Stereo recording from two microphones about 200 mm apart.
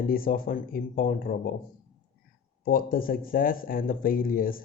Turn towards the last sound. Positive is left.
turn(degrees=45)  # may be behind; listen again after turning